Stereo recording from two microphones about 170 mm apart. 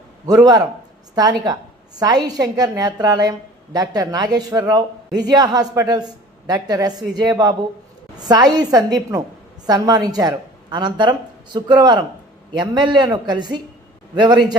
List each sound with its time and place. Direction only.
0.3 s a woman's voice: 25° right (ahead or behind)